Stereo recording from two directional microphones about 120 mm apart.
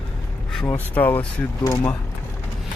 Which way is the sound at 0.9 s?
15° left (ahead or behind).